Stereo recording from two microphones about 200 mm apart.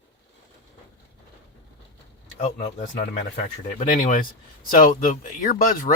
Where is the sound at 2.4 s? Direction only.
40° left (ahead or behind).